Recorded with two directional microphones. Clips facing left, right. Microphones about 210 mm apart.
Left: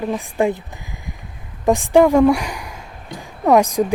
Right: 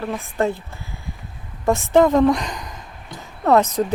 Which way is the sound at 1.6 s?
15° left (ahead or behind).